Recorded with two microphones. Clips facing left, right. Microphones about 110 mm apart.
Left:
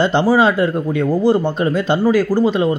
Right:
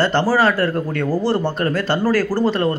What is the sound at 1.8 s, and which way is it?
Speech, 15° left (ahead or behind).